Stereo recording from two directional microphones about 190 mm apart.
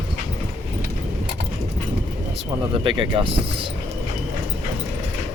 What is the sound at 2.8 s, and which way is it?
Speech, 25° right (ahead or behind).